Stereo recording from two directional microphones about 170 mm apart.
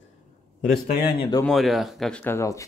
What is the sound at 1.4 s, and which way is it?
Speech, centre (ahead or behind).